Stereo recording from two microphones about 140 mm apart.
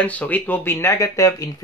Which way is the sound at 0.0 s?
10° left (ahead or behind).